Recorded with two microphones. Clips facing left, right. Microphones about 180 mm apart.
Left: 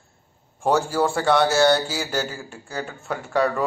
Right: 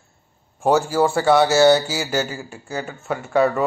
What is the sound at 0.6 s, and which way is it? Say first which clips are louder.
Speech: right 3 dB; 5° right (ahead or behind).